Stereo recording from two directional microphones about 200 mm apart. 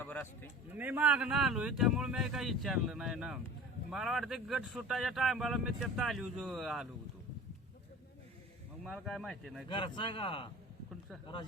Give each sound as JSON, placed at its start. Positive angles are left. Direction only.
{"t": 0.0, "sound": "a sound", "side_deg": 10}
{"t": 0.7, "sound": "speech", "side_deg": -10}
{"t": 8.8, "sound": "speech", "side_deg": 0}
{"t": 9.6, "sound": "speech", "side_deg": 25}